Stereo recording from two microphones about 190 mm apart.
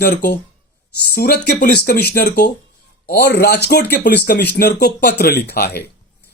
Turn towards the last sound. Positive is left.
turn(degrees=55)  # may be behind; listen again after turning